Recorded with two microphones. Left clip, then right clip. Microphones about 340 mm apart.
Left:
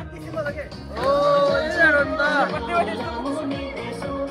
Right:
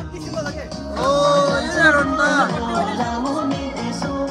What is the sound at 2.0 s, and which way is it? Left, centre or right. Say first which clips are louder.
Music: right 3 dB; right.